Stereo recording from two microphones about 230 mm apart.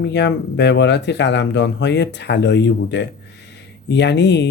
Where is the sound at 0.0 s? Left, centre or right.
Left.